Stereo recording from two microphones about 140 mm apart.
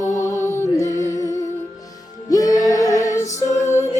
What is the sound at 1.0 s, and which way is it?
Music, 20° left (ahead or behind).